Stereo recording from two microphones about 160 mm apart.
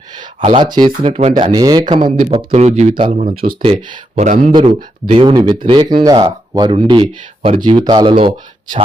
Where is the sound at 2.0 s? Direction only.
60° right (ahead or behind).